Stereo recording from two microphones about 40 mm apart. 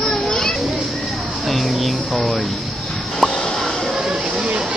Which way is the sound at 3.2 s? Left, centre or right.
Centre.